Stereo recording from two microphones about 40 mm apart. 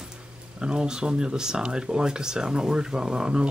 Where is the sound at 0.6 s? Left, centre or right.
Right.